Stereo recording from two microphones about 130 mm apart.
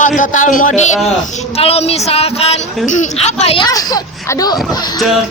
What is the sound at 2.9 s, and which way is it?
Speech, 65° left (ahead or behind).